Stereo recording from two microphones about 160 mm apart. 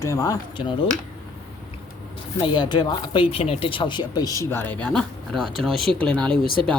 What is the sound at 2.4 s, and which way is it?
Speech, 30° left (ahead or behind).